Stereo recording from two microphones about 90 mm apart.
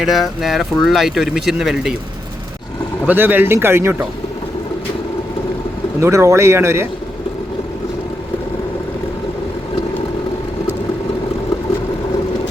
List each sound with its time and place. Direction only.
0.0 s speech: 5° right (ahead or behind)
3.1 s speech: 20° right (ahead or behind)
6.0 s speech: 35° right (ahead or behind)